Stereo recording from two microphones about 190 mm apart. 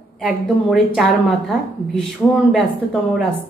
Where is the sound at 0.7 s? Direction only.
Centre (ahead or behind).